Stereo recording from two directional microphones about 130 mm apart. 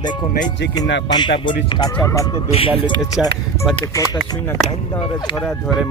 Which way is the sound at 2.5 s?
45° left (ahead or behind).